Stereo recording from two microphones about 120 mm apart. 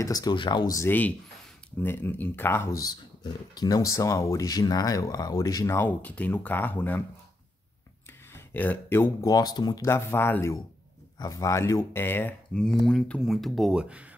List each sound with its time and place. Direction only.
0.0 s speech: 30° left (ahead or behind)
0.7 s speech: 15° left (ahead or behind)
5.8 s speech: 15° left (ahead or behind)
8.5 s speech: 15° left (ahead or behind)
9.3 s speech: 35° left (ahead or behind)
9.8 s speech: 20° left (ahead or behind)
12.6 s speech: 5° left (ahead or behind)